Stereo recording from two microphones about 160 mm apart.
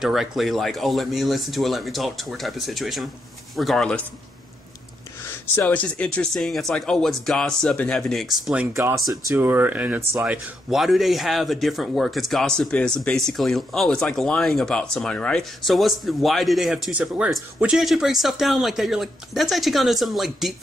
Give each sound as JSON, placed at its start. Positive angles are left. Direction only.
{"t": 0.0, "sound": "speech", "side_deg": 0}
{"t": 5.6, "sound": "speech", "side_deg": 10}
{"t": 8.7, "sound": "speech", "side_deg": -20}